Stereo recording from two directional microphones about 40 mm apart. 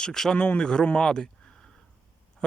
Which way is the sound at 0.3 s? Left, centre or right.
Left.